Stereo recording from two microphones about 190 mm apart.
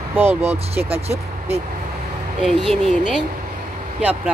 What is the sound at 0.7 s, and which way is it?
Speech, 30° right (ahead or behind).